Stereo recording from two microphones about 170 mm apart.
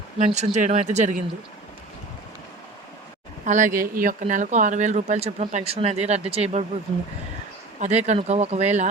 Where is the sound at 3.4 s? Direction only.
50° right (ahead or behind).